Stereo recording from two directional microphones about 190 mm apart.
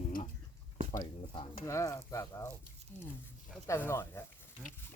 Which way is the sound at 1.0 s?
30° left (ahead or behind).